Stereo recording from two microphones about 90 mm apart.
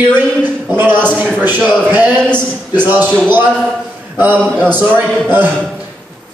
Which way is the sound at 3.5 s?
5° left (ahead or behind).